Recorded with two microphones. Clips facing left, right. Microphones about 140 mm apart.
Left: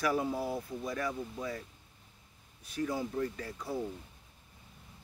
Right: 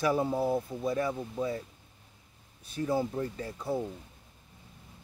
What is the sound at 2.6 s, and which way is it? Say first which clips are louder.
Speech: right 4 dB; 30° right (ahead or behind).